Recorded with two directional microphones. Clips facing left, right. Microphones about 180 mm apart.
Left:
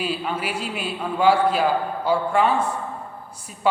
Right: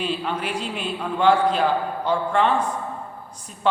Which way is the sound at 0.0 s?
5° left (ahead or behind).